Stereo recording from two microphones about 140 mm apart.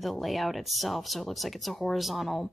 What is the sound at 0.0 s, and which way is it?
Speech, centre (ahead or behind).